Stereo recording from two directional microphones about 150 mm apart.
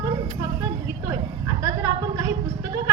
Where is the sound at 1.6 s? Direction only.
20° right (ahead or behind).